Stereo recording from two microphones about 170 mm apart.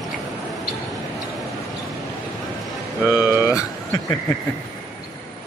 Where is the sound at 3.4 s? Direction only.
20° left (ahead or behind).